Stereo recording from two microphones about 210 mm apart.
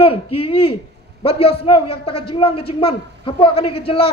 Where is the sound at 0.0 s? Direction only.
30° left (ahead or behind).